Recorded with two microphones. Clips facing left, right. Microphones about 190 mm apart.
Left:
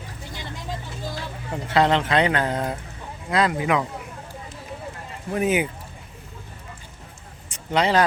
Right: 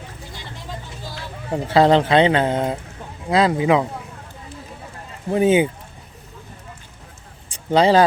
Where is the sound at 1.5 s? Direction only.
30° right (ahead or behind).